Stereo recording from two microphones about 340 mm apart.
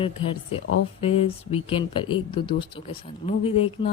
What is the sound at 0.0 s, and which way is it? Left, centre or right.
Speech, centre.